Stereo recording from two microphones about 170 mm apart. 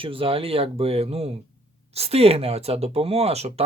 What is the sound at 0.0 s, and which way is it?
Speech, 30° right (ahead or behind).